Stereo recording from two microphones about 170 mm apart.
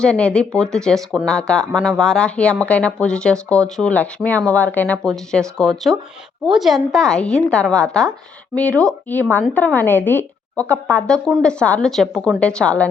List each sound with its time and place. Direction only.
0.0 s a woman's voice: 5° left (ahead or behind)